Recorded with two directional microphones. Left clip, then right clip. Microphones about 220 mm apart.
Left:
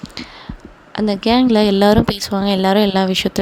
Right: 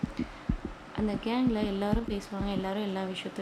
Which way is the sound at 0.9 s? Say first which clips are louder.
Left 16 dB; 45° left (ahead or behind).